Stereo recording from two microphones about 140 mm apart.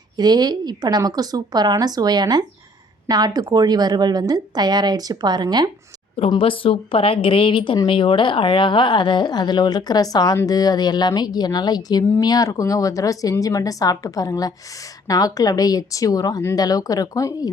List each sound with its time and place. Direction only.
0.2 s a woman's voice: 30° right (ahead or behind)
6.3 s a woman's voice: 40° left (ahead or behind)